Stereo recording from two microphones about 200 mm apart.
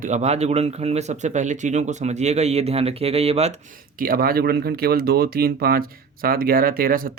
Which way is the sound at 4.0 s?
45° right (ahead or behind).